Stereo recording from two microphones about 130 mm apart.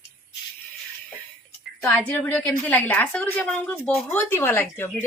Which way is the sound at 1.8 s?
15° left (ahead or behind).